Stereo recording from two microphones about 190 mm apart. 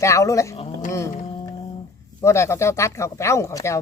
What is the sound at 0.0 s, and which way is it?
Speech, 15° left (ahead or behind).